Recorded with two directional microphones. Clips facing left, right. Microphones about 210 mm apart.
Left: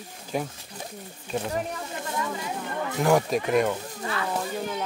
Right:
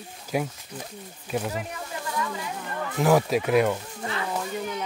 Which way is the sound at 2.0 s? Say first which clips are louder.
Right 1 dB; 25° left (ahead or behind).